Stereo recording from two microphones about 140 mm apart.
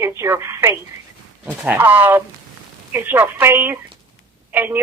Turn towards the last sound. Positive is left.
turn(degrees=-15)  # may be behind; listen again after turning